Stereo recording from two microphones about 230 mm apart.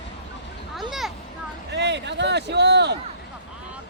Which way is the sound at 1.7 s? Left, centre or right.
Right.